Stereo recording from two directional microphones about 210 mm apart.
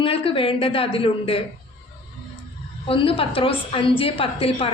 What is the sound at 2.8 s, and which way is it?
A woman's voice, 25° left (ahead or behind).